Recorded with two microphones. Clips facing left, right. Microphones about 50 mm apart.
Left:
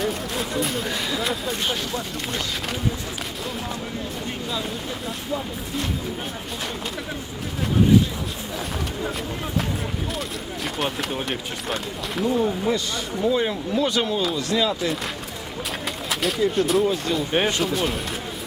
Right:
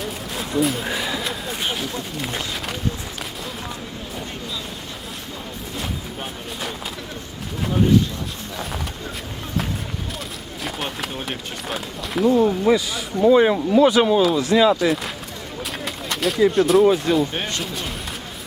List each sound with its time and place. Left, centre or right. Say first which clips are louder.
0.0 s a sound: left 3 dB; centre
1.6 s speech: even; centre
10.6 s speech: left 1 dB; centre
13.2 s speech: right 8 dB; right; by 15.1 s centre
15.8 s a sound: right 3 dB; centre
16.5 s speech: right 7 dB; centre